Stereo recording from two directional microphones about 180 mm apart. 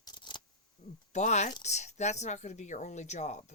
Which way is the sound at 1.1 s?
40° left (ahead or behind).